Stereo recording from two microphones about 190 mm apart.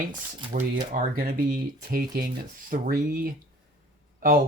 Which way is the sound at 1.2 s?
50° right (ahead or behind).